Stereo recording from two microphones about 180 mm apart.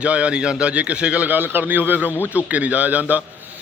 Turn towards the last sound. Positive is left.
turn(degrees=-10)  # may be behind; listen again after turning